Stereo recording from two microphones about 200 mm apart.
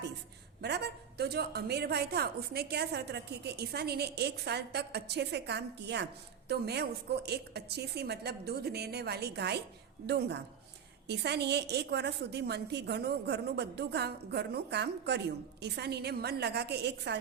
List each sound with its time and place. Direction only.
0.6 s a woman's voice: 55° right (ahead or behind)